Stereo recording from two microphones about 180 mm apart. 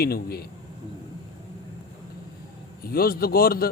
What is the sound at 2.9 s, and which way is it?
Speech, 55° left (ahead or behind).